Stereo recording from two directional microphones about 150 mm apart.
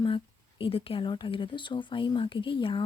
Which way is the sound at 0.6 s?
35° left (ahead or behind).